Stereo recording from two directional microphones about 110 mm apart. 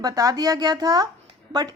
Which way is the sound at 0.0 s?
35° right (ahead or behind).